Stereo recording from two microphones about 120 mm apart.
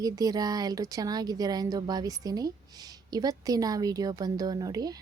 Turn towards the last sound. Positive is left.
turn(degrees=-30)  # may be behind; listen again after turning